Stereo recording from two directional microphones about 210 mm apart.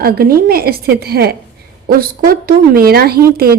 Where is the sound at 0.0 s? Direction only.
45° right (ahead or behind).